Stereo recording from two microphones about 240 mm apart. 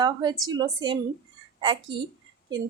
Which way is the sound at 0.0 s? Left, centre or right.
Centre.